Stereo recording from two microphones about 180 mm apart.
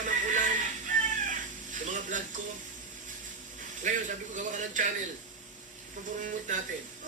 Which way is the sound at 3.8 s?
45° right (ahead or behind).